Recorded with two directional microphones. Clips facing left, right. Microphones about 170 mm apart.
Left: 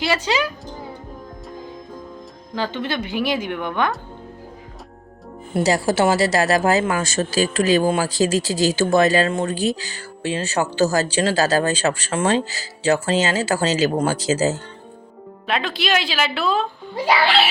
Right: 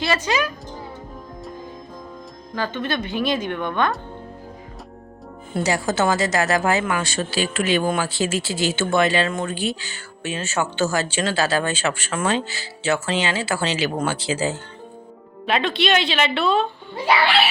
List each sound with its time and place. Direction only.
0.3 s speech: 20° left (ahead or behind)
2.6 s a woman's voice: 15° left (ahead or behind)
3.1 s a woman's voice: 20° right (ahead or behind)
3.3 s a woman's voice: 10° left (ahead or behind)
5.6 s speech: 35° left (ahead or behind)
15.4 s a woman's voice: centre (ahead or behind)